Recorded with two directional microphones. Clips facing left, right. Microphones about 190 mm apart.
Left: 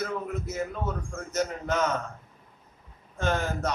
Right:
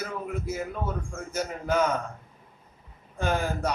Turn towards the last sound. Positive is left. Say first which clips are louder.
# right 1 dB
turn(degrees=-10)  # may be behind; listen again after turning